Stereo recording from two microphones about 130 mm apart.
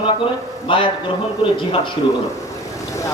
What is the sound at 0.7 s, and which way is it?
Speech, 40° left (ahead or behind).